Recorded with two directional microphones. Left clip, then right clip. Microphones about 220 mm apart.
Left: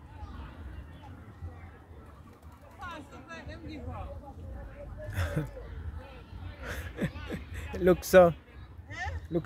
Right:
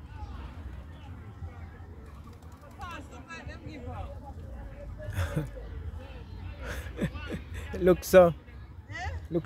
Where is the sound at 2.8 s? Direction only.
20° right (ahead or behind).